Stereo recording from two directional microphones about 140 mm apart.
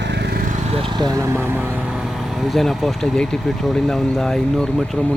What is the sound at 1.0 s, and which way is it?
Speech, 25° right (ahead or behind).